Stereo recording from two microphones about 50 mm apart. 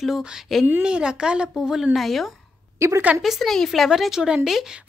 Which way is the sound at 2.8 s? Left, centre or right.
Right.